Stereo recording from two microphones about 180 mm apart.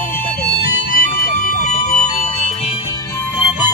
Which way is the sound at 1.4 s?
40° left (ahead or behind).